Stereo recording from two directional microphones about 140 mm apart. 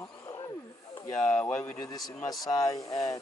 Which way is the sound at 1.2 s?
15° left (ahead or behind).